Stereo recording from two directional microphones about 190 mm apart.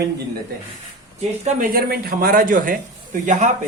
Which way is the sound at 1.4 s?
45° right (ahead or behind).